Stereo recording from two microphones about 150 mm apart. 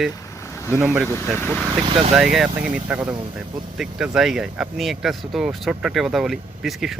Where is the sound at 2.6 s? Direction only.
10° right (ahead or behind).